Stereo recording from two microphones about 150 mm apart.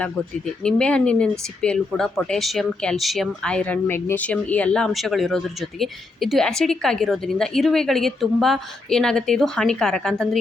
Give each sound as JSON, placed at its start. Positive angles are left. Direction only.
{"t": 0.6, "sound": "speech", "side_deg": 5}